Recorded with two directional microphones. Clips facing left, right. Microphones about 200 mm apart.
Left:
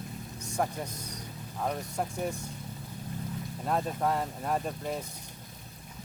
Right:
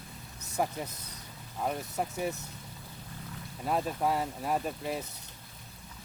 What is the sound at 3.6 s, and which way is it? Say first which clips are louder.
Speech: even; 5° right (ahead or behind).